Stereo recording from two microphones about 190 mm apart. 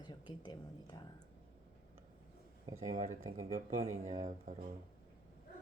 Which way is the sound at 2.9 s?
40° right (ahead or behind).